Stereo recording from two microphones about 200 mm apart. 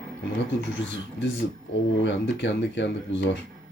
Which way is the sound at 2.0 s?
65° left (ahead or behind).